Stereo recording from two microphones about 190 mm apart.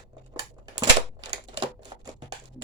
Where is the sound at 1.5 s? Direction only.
25° right (ahead or behind).